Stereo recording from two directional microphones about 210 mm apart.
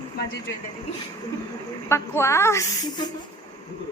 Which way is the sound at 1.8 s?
15° left (ahead or behind).